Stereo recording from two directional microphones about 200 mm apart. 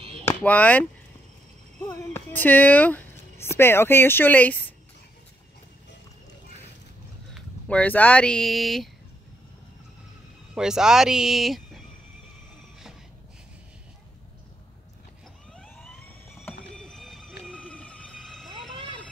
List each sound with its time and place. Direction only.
0.2 s speech: 10° left (ahead or behind)
7.3 s speech: 5° left (ahead or behind)
10.5 s speech: 5° right (ahead or behind)
15.5 s emergency vehicle: 5° left (ahead or behind)
16.7 s a sound: 5° left (ahead or behind)